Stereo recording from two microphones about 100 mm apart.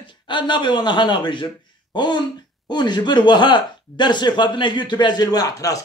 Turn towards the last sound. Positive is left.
turn(degrees=35)  # may be behind; listen again after turning